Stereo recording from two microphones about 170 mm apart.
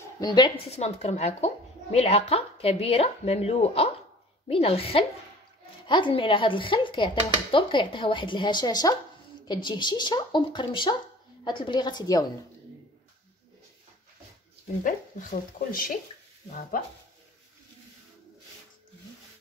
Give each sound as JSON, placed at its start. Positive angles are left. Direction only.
{"t": 0.2, "sound": "speech", "side_deg": 25}
{"t": 0.7, "sound": "speech", "side_deg": 40}
{"t": 14.8, "sound": "speech", "side_deg": 50}